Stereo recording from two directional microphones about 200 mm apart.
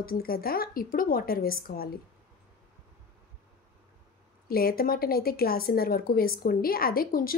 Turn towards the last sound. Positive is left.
turn(degrees=45)  # may be behind; listen again after turning